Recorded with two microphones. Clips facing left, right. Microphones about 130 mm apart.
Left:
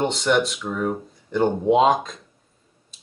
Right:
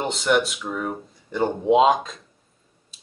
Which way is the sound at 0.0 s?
Centre (ahead or behind).